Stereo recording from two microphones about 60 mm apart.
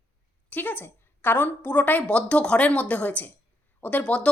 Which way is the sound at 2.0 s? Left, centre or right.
Centre.